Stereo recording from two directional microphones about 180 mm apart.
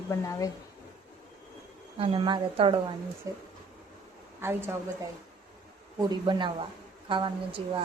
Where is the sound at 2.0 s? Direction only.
30° right (ahead or behind); by 4.7 s 15° right (ahead or behind).